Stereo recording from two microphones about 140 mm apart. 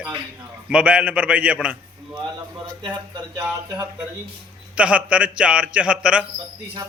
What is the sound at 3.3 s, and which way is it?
Speech, 25° right (ahead or behind).